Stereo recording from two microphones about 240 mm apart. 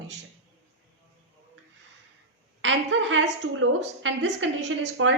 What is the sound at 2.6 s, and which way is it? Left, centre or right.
A woman's voice, right.